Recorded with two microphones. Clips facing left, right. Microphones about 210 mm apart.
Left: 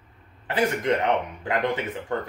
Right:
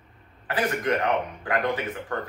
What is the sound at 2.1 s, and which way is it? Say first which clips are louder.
Speech: left 4 dB; 25° left (ahead or behind).